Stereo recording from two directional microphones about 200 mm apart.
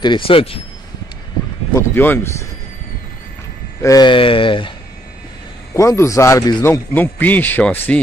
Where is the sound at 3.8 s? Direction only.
20° left (ahead or behind).